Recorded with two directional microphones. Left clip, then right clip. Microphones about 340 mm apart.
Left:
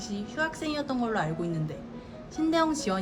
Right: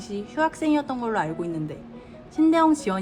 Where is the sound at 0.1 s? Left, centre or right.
Centre.